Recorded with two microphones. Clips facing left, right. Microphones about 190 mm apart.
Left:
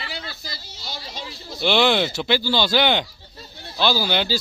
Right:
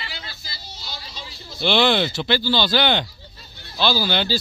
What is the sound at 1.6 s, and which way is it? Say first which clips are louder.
Speech: even; 10° left (ahead or behind).